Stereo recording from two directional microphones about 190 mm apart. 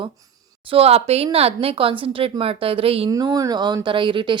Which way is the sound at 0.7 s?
30° right (ahead or behind).